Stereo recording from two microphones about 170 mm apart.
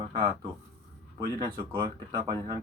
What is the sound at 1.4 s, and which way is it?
Speech, 25° right (ahead or behind).